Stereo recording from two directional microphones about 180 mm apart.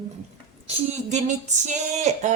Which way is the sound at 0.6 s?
40° right (ahead or behind).